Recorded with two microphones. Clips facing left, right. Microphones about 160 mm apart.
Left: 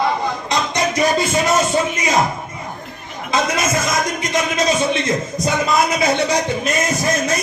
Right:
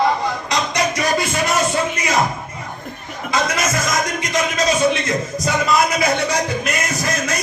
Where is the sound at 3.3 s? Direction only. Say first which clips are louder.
Left 2 dB; 25° left (ahead or behind).